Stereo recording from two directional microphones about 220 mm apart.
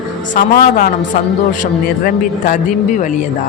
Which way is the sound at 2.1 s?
40° left (ahead or behind).